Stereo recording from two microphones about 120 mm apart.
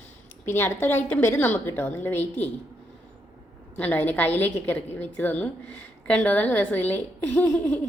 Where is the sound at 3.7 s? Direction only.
15° left (ahead or behind).